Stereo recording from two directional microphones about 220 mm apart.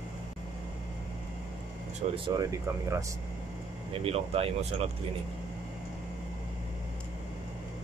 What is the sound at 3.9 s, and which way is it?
Speech, 25° right (ahead or behind).